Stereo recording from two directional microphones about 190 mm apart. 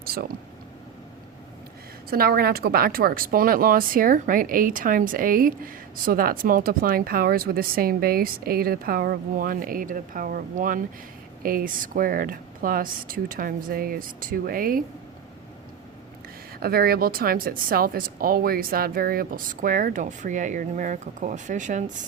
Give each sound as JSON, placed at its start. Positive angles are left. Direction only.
{"t": 0.0, "sound": "speech", "side_deg": -50}
{"t": 2.0, "sound": "a woman's voice", "side_deg": -50}
{"t": 16.6, "sound": "a woman's voice", "side_deg": -50}